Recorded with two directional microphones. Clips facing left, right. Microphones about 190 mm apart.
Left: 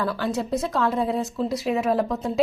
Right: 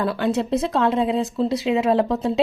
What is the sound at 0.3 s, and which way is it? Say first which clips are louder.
Speech: right 7 dB; 65° right (ahead or behind).